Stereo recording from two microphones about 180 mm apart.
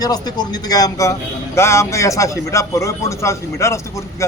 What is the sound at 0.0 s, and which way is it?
Speech, 20° left (ahead or behind).